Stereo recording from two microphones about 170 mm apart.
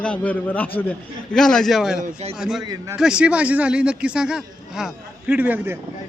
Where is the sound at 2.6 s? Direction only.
20° right (ahead or behind).